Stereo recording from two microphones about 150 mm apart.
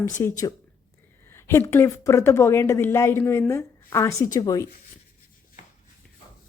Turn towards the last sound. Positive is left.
turn(degrees=25)  # may be behind; listen again after turning